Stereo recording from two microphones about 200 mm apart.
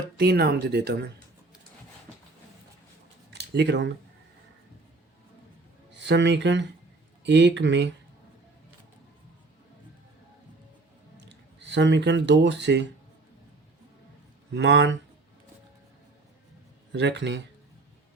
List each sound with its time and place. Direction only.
0.2 s speech: 50° right (ahead or behind)
3.3 s speech: 60° right (ahead or behind)
6.0 s speech: 65° right (ahead or behind)
11.2 s speech: 60° right (ahead or behind)
14.5 s speech: 60° right (ahead or behind)
16.9 s speech: 60° right (ahead or behind)